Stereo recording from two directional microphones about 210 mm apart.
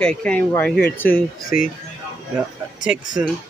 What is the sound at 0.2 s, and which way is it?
Speech, 5° left (ahead or behind).